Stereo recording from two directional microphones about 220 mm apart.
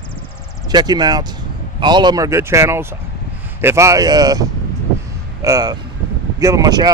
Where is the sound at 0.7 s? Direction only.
20° right (ahead or behind).